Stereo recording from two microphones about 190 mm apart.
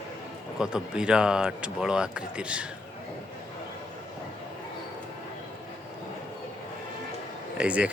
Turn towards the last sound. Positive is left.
turn(degrees=-5)  # may be behind; listen again after turning